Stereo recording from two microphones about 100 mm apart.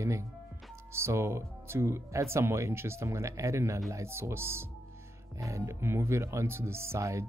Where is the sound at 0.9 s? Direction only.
25° right (ahead or behind).